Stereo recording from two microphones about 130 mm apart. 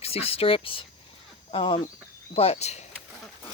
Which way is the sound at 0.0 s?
50° left (ahead or behind).